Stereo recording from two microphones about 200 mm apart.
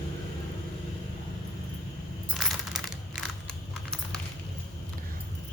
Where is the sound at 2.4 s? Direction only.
Centre (ahead or behind).